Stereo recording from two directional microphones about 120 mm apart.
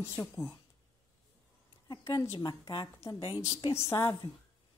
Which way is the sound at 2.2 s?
25° left (ahead or behind).